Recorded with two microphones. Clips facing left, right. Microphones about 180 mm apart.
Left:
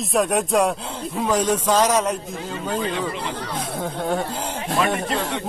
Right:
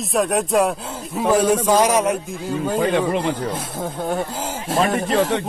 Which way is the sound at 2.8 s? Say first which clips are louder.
Right 9 dB; 60° right (ahead or behind).